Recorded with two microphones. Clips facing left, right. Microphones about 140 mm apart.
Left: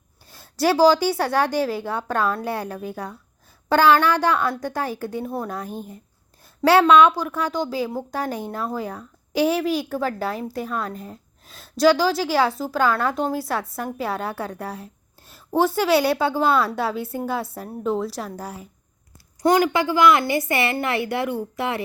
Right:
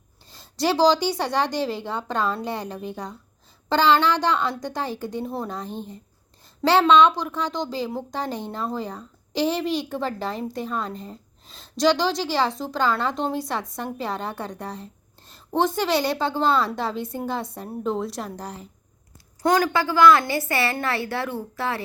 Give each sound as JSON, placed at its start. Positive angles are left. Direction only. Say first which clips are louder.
{"t": 0.3, "sound": "a woman's voice", "louder": "left 3 dB", "side_deg": 5}